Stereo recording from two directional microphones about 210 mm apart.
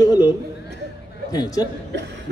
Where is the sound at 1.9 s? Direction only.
55° right (ahead or behind).